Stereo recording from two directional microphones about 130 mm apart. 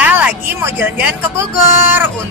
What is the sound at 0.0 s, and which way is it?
A woman's voice, 10° right (ahead or behind).